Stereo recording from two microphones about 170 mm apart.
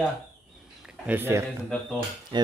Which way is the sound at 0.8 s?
10° right (ahead or behind).